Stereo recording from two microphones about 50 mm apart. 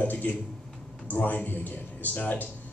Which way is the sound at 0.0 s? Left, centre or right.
Left.